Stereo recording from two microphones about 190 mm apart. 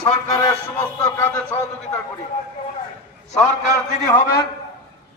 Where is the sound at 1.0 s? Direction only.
15° left (ahead or behind).